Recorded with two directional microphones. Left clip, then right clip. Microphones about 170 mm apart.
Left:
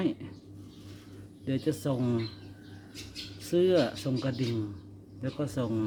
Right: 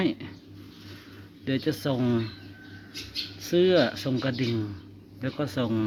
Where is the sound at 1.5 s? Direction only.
10° right (ahead or behind).